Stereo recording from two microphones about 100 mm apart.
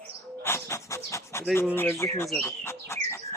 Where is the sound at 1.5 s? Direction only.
20° left (ahead or behind).